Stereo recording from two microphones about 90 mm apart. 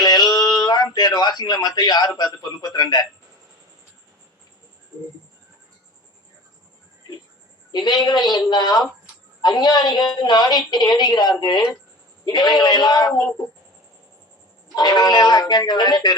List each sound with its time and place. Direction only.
0.0 s a sound: 50° left (ahead or behind)
2.1 s a woman's voice: 50° left (ahead or behind)
7.7 s a woman's voice: 55° left (ahead or behind)
14.8 s a woman's voice: 50° left (ahead or behind)